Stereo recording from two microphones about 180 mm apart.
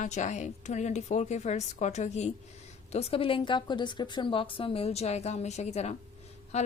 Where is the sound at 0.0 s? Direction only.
40° left (ahead or behind).